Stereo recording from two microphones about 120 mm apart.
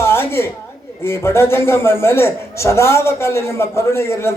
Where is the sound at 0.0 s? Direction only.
20° left (ahead or behind).